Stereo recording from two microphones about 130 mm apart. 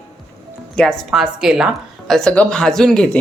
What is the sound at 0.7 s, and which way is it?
Speech, 5° left (ahead or behind).